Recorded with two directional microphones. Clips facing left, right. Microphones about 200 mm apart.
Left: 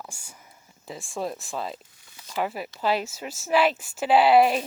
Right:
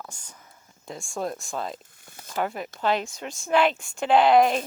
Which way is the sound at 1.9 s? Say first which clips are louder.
Right 4 dB; 50° right (ahead or behind).